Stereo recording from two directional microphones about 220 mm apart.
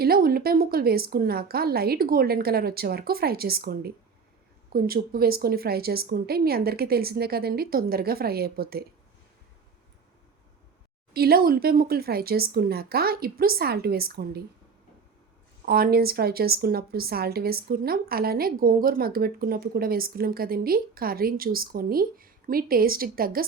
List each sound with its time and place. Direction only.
0.0 s a woman's voice: 45° right (ahead or behind)
11.1 s a woman's voice: 45° right (ahead or behind)
15.6 s a woman's voice: 45° right (ahead or behind)